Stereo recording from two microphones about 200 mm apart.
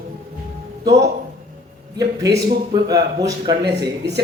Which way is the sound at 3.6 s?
55° right (ahead or behind).